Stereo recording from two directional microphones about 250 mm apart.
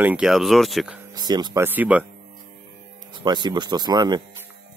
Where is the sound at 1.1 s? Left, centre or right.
Centre.